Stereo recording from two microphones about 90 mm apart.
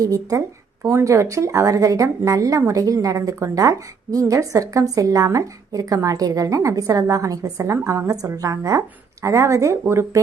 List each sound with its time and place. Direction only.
0.0 s a woman's voice: 40° right (ahead or behind)